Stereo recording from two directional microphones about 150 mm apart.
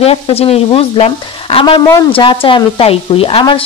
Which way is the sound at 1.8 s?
25° left (ahead or behind).